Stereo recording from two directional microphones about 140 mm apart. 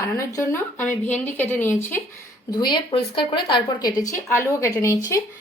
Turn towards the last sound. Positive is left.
turn(degrees=20)  # may be behind; listen again after turning